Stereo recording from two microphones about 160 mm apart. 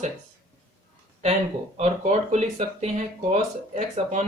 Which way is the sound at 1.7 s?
45° right (ahead or behind).